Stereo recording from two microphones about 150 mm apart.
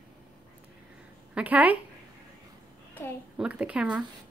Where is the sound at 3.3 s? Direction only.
5° right (ahead or behind).